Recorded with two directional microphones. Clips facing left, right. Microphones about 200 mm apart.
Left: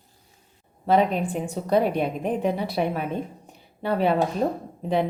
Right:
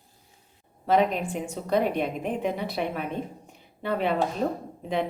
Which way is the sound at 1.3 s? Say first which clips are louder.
Left 3 dB; 35° left (ahead or behind).